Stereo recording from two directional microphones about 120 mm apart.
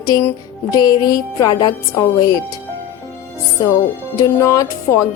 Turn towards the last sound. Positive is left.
turn(degrees=25)  # may be behind; listen again after turning